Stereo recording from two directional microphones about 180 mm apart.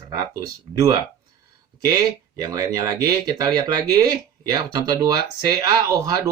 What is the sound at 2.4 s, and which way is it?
Speech, 20° right (ahead or behind).